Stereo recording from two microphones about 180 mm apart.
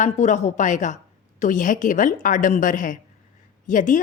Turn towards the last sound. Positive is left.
turn(degrees=45)  # may be behind; listen again after turning